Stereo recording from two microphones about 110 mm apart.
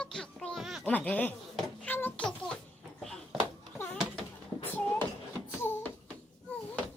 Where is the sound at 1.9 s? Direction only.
15° left (ahead or behind).